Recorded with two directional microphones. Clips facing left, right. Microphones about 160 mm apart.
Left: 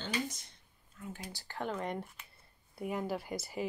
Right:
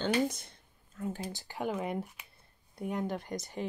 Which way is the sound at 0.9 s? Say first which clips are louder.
Right 8 dB; 35° right (ahead or behind).